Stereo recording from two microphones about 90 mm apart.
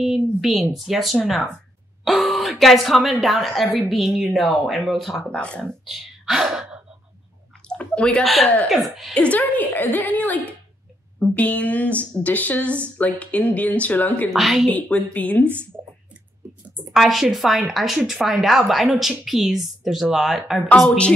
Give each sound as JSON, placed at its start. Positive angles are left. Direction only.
{"t": 0.0, "sound": "speech", "side_deg": -5}
{"t": 5.3, "sound": "a woman's voice", "side_deg": 10}
{"t": 5.9, "sound": "speech", "side_deg": 0}
{"t": 7.6, "sound": "a sound", "side_deg": 10}
{"t": 8.6, "sound": "speech", "side_deg": 0}
{"t": 9.1, "sound": "a woman's voice", "side_deg": 15}
{"t": 14.3, "sound": "speech", "side_deg": 0}
{"t": 14.7, "sound": "a woman's voice", "side_deg": 15}
{"t": 16.9, "sound": "speech", "side_deg": -5}
{"t": 20.7, "sound": "a woman's voice", "side_deg": 10}